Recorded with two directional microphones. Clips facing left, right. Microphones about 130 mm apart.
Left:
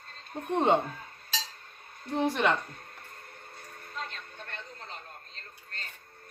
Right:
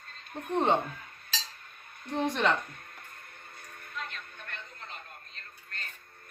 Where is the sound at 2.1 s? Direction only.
5° left (ahead or behind).